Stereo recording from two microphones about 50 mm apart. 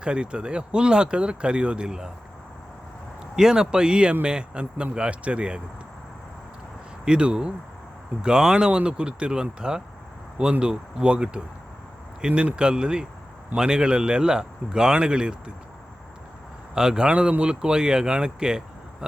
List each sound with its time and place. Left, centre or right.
0.0 s speech: centre
3.3 s speech: centre
7.0 s speech: centre
16.7 s speech: centre